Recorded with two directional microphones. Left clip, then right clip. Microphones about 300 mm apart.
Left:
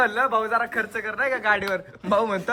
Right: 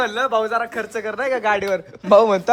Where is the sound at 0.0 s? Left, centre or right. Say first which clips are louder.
Right 2 dB; centre.